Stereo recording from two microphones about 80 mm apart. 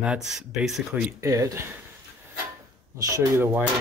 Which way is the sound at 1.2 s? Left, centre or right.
Right.